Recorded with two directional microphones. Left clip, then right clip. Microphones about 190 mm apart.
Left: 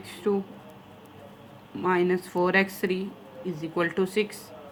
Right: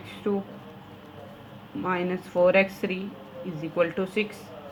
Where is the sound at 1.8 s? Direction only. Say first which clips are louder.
Left 4 dB; 50° left (ahead or behind).